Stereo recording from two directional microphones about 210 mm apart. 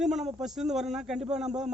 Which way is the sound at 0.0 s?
Centre (ahead or behind).